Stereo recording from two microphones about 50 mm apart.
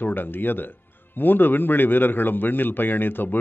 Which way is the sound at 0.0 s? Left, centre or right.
Left.